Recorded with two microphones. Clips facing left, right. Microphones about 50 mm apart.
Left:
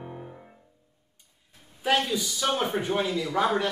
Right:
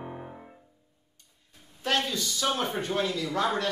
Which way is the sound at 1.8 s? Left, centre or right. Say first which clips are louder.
Left 3 dB; centre.